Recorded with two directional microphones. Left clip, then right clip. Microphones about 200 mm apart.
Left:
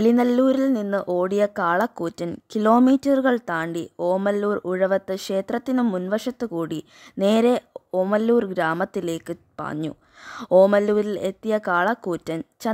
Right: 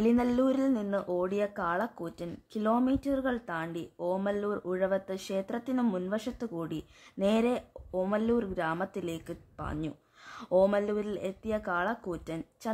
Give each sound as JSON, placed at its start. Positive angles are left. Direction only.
{"t": 0.0, "sound": "speech", "side_deg": 40}